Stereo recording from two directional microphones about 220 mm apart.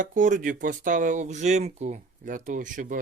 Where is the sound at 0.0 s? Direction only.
35° right (ahead or behind).